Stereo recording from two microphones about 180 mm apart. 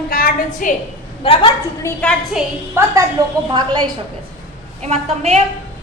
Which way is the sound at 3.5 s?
25° right (ahead or behind).